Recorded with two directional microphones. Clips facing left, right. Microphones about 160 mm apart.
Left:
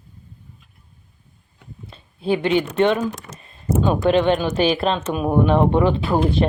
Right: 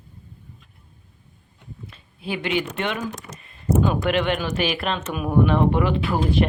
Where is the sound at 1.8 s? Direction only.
30° left (ahead or behind).